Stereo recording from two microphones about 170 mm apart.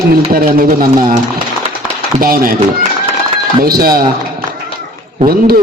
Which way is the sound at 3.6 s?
60° right (ahead or behind).